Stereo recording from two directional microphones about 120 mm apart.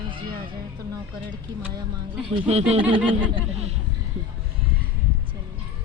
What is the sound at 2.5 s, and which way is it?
Speech, 65° right (ahead or behind).